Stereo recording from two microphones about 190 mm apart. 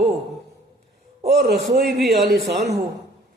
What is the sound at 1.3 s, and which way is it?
A man's voice, 60° right (ahead or behind).